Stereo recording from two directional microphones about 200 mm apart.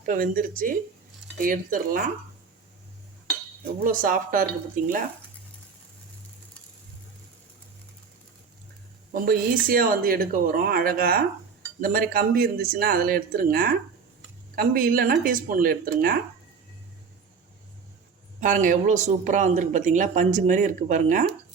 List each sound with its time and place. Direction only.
0.0 s speech: 45° right (ahead or behind)
3.8 s speech: 45° right (ahead or behind)
9.1 s speech: 45° right (ahead or behind)
18.3 s speech: 40° right (ahead or behind)